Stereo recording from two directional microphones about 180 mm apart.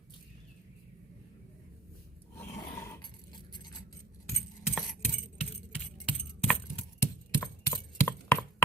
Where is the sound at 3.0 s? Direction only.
25° left (ahead or behind).